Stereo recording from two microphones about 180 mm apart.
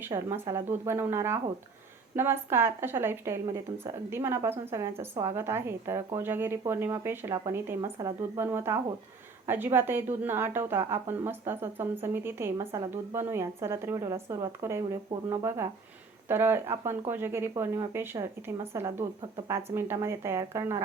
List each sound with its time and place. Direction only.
0.0 s a woman's voice: 15° right (ahead or behind)